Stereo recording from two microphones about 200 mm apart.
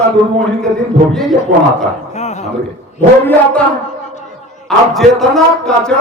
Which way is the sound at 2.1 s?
35° left (ahead or behind).